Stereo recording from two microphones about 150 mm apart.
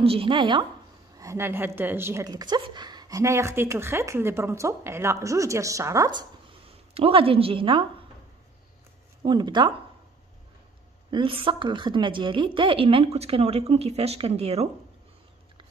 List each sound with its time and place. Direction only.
0.0 s a woman's voice: 40° right (ahead or behind)
1.1 s a woman's voice: 20° right (ahead or behind)
2.2 s a woman's voice: 25° right (ahead or behind)
6.9 s a woman's voice: 40° right (ahead or behind)
9.2 s a woman's voice: 30° right (ahead or behind)
11.1 s a woman's voice: 35° right (ahead or behind)